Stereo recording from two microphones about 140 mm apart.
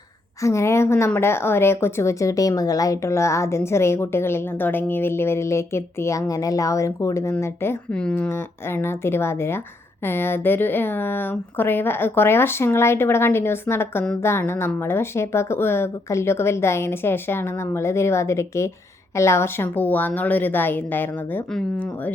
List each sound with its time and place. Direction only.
0.4 s a woman's voice: 20° left (ahead or behind)